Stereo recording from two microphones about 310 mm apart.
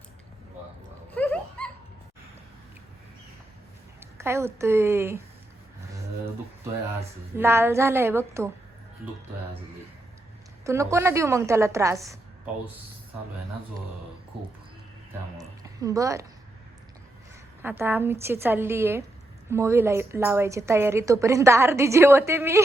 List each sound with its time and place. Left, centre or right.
1.1 s a sound: centre
4.2 s a woman's voice: centre
7.3 s a woman's voice: centre
10.6 s a woman's voice: centre
15.4 s a woman's voice: centre
17.6 s a woman's voice: centre